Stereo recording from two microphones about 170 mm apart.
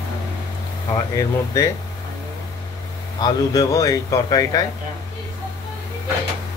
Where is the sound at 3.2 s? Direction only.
20° left (ahead or behind).